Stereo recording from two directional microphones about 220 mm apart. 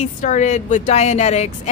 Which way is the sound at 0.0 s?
35° left (ahead or behind).